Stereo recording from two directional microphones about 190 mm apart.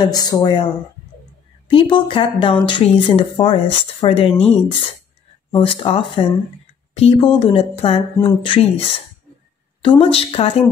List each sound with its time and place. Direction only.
0.0 s speech: 20° left (ahead or behind)
1.7 s speech: 25° left (ahead or behind)
5.5 s speech: 25° left (ahead or behind)